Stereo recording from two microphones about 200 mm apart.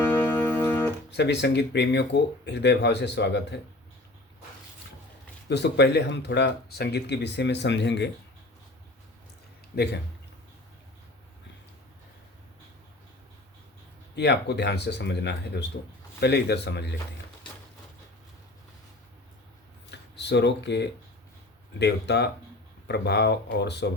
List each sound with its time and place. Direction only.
0.0 s music: 10° left (ahead or behind)
1.1 s speech: 55° left (ahead or behind)
5.5 s speech: 55° left (ahead or behind)
9.7 s speech: 55° left (ahead or behind)
14.2 s speech: 55° left (ahead or behind)
19.9 s a sound: 60° left (ahead or behind)
21.8 s speech: 55° left (ahead or behind)